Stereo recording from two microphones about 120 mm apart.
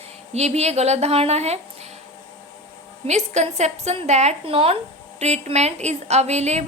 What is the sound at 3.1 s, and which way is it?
A woman's voice, 70° right (ahead or behind).